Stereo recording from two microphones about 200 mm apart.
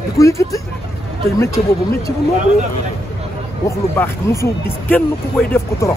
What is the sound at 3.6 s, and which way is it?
Speech, 15° left (ahead or behind).